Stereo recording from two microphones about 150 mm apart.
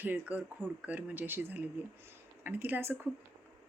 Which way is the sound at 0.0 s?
10° right (ahead or behind).